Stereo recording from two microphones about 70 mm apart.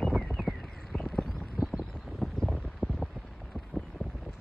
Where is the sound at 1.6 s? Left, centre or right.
Centre.